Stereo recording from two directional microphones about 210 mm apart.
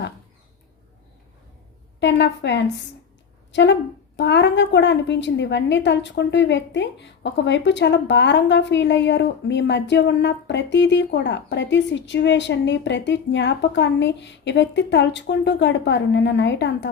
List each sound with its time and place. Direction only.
2.0 s a woman's voice: 55° left (ahead or behind)